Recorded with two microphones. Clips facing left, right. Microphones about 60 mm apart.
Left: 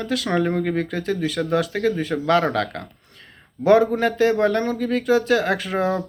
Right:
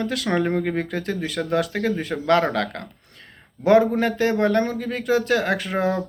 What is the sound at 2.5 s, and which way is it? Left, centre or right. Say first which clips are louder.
A man's voice: left 1 dB; right.